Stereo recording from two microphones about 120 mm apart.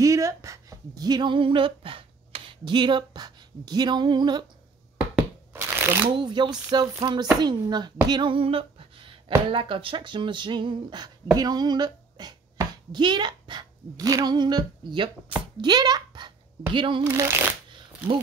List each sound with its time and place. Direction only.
0.0 s speech: 25° right (ahead or behind)
5.5 s shuffling cards: 20° right (ahead or behind)
6.1 s speech: 40° right (ahead or behind)
17.0 s speech: 25° right (ahead or behind)